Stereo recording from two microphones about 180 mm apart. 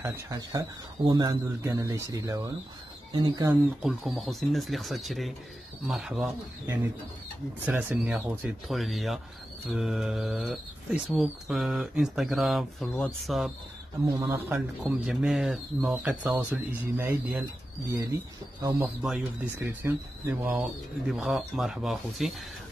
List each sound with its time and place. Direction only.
0.0 s speech: 20° right (ahead or behind)
3.8 s speech: centre (ahead or behind)
14.1 s speech: 15° right (ahead or behind)
14.9 s speech: centre (ahead or behind); by 18.9 s 20° right (ahead or behind)
19.0 s speech: 5° right (ahead or behind)